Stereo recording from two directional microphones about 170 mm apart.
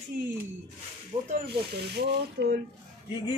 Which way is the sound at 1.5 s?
80° right.